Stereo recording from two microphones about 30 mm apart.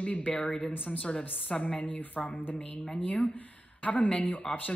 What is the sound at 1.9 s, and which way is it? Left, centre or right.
Speech, left.